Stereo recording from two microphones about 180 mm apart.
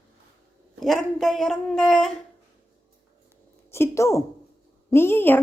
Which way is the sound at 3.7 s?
15° left (ahead or behind).